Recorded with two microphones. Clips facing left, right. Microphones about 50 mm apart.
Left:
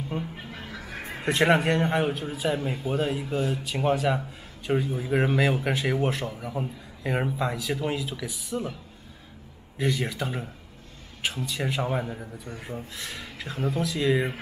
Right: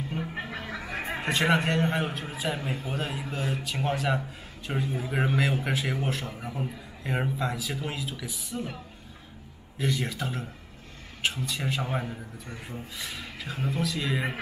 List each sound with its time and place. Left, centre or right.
0.3 s music: right
1.0 s a sound: right
1.3 s speech: centre
9.8 s speech: centre